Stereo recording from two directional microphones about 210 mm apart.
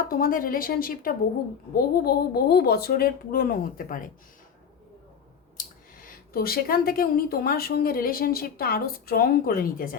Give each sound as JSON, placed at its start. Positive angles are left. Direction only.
{"t": 0.1, "sound": "speech", "side_deg": 40}
{"t": 5.5, "sound": "speech", "side_deg": 45}